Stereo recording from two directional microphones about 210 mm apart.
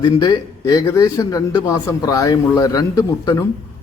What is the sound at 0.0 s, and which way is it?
Speech, 20° left (ahead or behind).